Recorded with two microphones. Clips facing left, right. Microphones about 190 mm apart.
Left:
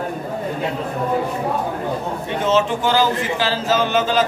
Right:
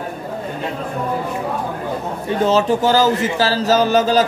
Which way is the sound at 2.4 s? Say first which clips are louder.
Right 3 dB; 40° right (ahead or behind).